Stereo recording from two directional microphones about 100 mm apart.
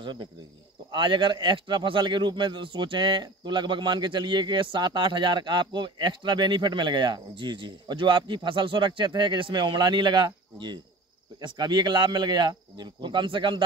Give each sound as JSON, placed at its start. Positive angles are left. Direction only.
{"t": 0.0, "sound": "speech", "side_deg": -50}